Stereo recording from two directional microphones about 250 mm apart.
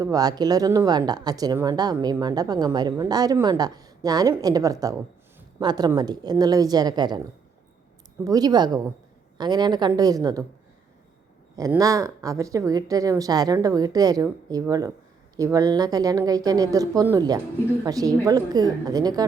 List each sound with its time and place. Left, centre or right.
0.0 s a woman's voice: centre
8.2 s a woman's voice: centre
11.5 s a woman's voice: centre